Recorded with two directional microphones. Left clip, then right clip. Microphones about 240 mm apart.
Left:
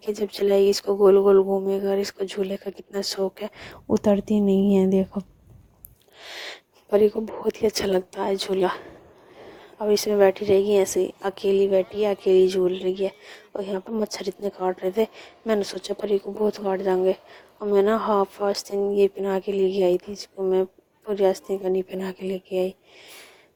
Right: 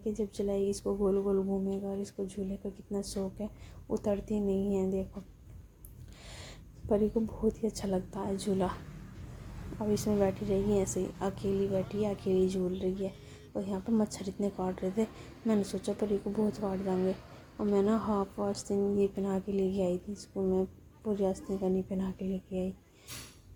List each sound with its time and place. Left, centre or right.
0.1 s speech: left
6.2 s owl: left
7.4 s speech: left